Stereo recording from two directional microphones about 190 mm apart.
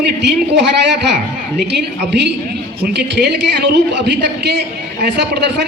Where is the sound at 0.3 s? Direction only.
60° right (ahead or behind).